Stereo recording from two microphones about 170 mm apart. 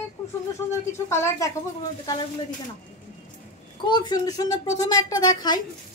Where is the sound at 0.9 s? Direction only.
15° left (ahead or behind).